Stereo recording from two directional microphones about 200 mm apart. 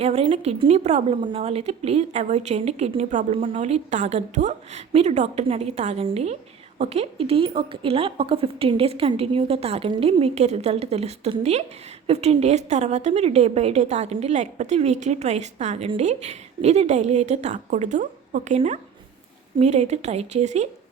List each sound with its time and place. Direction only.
0.0 s a woman's voice: 30° right (ahead or behind)